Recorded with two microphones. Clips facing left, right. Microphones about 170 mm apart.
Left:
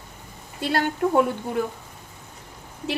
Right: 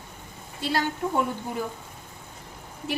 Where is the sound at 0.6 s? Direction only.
55° left (ahead or behind).